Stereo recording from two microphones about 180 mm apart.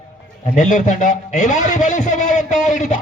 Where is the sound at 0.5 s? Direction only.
40° left (ahead or behind).